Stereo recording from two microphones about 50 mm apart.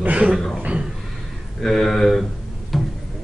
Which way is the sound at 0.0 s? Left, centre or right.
Right.